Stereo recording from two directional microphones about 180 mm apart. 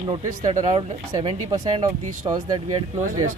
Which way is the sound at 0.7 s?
30° right (ahead or behind).